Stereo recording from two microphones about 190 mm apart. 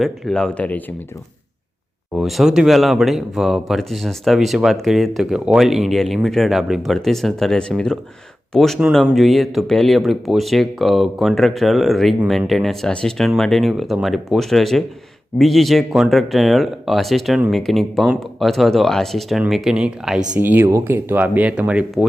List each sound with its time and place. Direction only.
0.0 s speech: 5° left (ahead or behind)
2.1 s speech: centre (ahead or behind)